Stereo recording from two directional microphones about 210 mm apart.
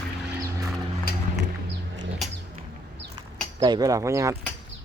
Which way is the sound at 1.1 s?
45° left (ahead or behind).